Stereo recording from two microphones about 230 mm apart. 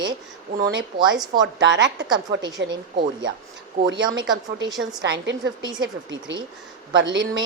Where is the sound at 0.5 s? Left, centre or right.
Right.